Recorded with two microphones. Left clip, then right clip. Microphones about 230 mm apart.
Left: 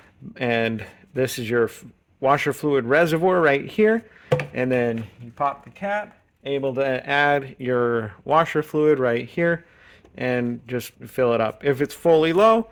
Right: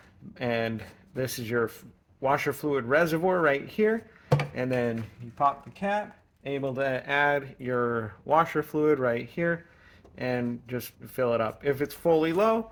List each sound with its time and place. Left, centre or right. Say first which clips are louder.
0.3 s speech: left 7 dB; left
5.4 s speech: left 1 dB; left
6.4 s speech: left 6 dB; left